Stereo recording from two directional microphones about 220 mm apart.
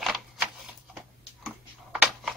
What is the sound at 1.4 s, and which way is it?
Computer keyboard, 5° right (ahead or behind).